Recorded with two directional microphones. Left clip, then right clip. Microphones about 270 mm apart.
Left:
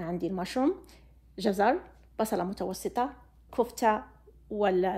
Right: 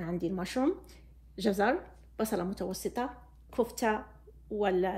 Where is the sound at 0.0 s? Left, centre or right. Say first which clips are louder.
Left 2 dB; left.